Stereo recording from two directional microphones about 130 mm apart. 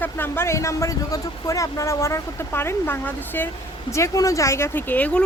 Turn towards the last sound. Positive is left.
turn(degrees=10)  # may be behind; listen again after turning